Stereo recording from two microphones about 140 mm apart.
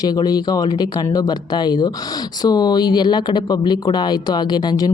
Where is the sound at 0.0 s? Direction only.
30° left (ahead or behind).